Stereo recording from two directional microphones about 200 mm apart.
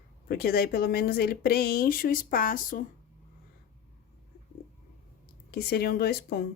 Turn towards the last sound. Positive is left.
turn(degrees=50)  # may be behind; listen again after turning